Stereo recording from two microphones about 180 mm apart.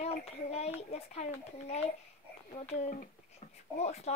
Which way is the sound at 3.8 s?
35° left (ahead or behind).